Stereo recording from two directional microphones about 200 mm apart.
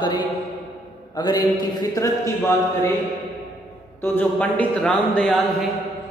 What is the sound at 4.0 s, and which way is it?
A man's voice, 10° left (ahead or behind).